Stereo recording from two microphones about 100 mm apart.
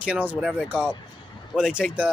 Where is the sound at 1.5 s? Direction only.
10° right (ahead or behind).